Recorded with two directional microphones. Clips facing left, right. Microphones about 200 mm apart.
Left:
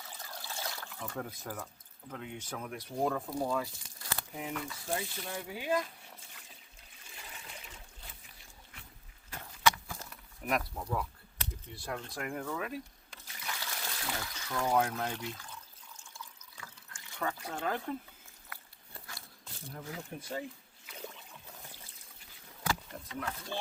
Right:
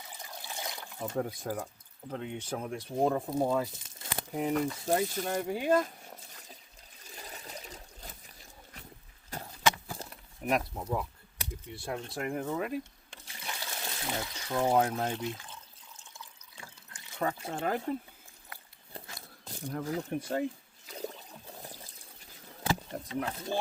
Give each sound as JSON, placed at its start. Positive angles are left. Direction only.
{"t": 0.0, "sound": "water", "side_deg": -15}
{"t": 2.0, "sound": "speech", "side_deg": -30}
{"t": 4.4, "sound": "speech", "side_deg": -40}
{"t": 7.0, "sound": "water", "side_deg": -40}
{"t": 9.6, "sound": "a sound", "side_deg": -25}
{"t": 16.1, "sound": "water", "side_deg": -20}
{"t": 17.3, "sound": "speech", "side_deg": -25}
{"t": 18.4, "sound": "a sound", "side_deg": -25}
{"t": 19.5, "sound": "a sound", "side_deg": -40}
{"t": 20.1, "sound": "speech", "side_deg": -65}
{"t": 20.8, "sound": "trickle", "side_deg": -35}
{"t": 22.6, "sound": "a sound", "side_deg": -30}